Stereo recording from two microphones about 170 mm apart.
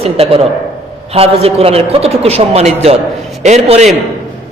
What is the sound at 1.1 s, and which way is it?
A man's voice, 35° right (ahead or behind).